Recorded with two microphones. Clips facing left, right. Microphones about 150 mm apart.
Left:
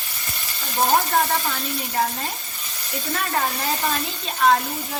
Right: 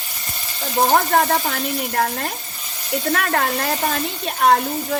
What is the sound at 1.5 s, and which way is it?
Speech, 60° right (ahead or behind).